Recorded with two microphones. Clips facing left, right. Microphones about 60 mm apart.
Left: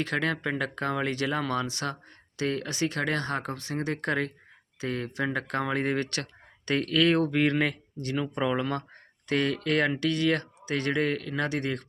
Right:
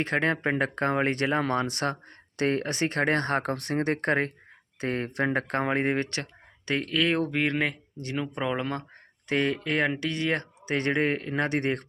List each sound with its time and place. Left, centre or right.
0.0 s speech: right
6.7 s speech: centre; by 11.9 s right